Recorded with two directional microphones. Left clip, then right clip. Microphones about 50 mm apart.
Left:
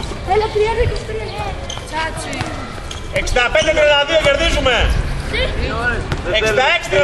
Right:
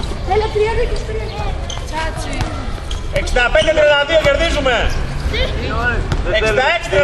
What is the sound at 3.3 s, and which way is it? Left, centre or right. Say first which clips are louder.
A man's voice: right 1 dB; left.